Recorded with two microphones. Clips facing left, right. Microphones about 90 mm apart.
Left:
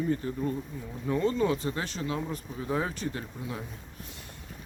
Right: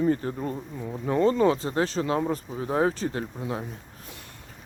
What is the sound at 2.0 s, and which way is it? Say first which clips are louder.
Speech: right 7 dB; 55° right (ahead or behind).